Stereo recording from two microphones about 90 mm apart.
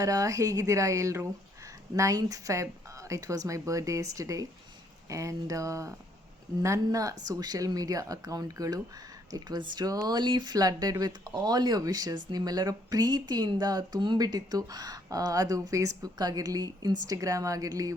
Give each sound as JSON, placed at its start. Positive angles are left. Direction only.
{"t": 0.0, "sound": "speech", "side_deg": -40}